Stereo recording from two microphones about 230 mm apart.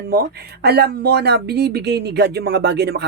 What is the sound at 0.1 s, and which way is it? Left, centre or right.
Speech, right.